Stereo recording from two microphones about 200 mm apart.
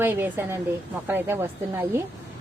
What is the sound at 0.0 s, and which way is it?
A woman's voice, 10° right (ahead or behind).